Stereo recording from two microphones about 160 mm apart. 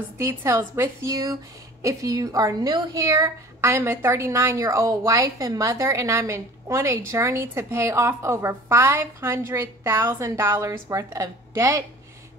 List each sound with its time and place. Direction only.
0.2 s a woman's voice: 15° right (ahead or behind)